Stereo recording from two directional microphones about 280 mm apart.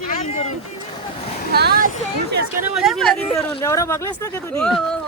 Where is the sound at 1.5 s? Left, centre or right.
Right.